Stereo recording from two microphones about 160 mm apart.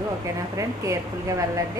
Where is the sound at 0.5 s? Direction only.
20° right (ahead or behind).